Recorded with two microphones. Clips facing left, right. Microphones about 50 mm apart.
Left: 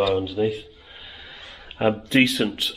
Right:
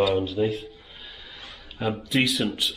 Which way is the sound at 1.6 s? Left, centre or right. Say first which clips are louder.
Left 7 dB; left.